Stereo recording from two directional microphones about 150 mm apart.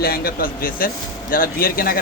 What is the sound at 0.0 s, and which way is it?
Speech, 90° left.